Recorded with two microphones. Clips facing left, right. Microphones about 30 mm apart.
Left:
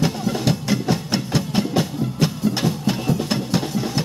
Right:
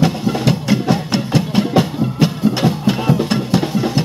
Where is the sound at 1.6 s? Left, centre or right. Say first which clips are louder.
Right 6 dB; right.